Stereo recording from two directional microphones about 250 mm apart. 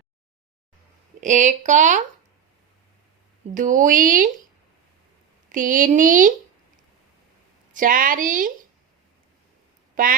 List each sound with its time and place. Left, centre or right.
1.2 s speech: right
3.5 s speech: right
5.5 s speech: right
7.7 s speech: right
9.9 s speech: right